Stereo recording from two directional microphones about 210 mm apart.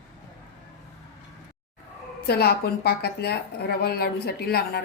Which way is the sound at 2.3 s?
50° left (ahead or behind).